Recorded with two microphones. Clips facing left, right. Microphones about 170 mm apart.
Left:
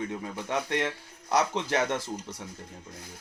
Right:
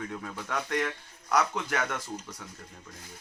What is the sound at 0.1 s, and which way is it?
Speech, 20° left (ahead or behind).